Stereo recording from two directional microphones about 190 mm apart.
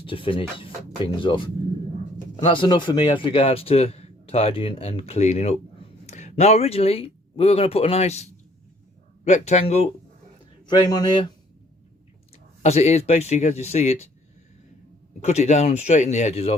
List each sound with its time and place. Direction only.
0.0 s speech: 30° left (ahead or behind)
10.7 s speech: 20° left (ahead or behind)
12.6 s speech: 35° left (ahead or behind)
15.2 s speech: 35° left (ahead or behind)